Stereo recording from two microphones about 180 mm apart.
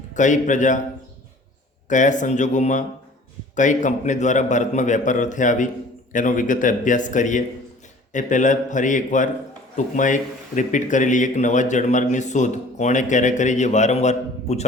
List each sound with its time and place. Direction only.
0.1 s speech: 45° left (ahead or behind)
1.9 s speech: 45° left (ahead or behind)